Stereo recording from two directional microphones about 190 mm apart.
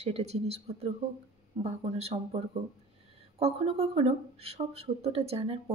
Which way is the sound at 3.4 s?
30° right (ahead or behind).